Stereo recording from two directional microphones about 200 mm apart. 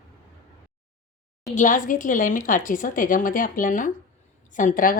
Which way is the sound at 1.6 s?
40° left (ahead or behind).